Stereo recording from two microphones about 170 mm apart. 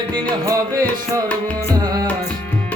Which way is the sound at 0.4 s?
20° right (ahead or behind).